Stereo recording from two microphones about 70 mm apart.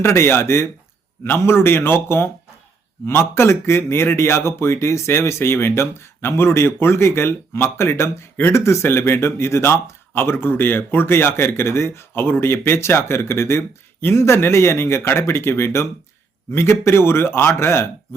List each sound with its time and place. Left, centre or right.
0.0 s speech: left